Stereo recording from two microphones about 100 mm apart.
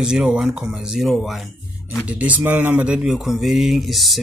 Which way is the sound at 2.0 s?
15° right (ahead or behind).